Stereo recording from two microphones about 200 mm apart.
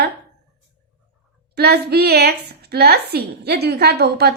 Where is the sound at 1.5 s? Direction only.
55° right (ahead or behind).